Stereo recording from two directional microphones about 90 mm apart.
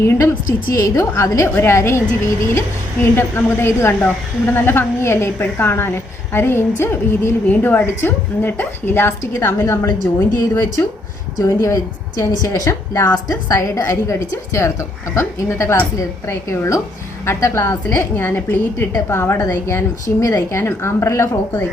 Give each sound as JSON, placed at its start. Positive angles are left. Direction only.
{"t": 0.0, "sound": "a woman's voice", "side_deg": 25}
{"t": 10.5, "sound": "a woman's voice", "side_deg": 25}
{"t": 11.3, "sound": "a woman's voice", "side_deg": 40}